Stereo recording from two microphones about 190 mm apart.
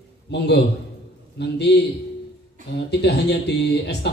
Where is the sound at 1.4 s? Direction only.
60° left (ahead or behind).